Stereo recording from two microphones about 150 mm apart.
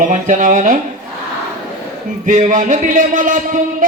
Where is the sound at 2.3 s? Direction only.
60° right (ahead or behind).